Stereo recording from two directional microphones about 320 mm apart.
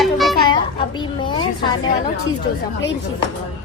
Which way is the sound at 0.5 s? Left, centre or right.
Centre.